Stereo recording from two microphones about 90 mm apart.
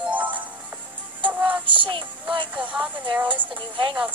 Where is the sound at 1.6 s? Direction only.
65° right (ahead or behind).